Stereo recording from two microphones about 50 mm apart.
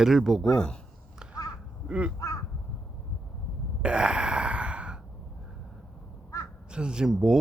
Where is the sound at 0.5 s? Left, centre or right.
Centre.